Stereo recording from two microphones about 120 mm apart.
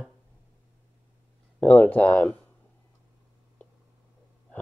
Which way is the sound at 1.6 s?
15° left (ahead or behind).